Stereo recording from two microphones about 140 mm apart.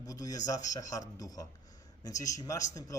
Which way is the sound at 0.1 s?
25° left (ahead or behind).